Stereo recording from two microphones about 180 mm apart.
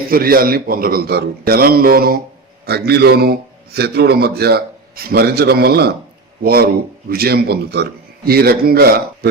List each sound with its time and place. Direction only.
0.1 s a man's voice: 55° right (ahead or behind)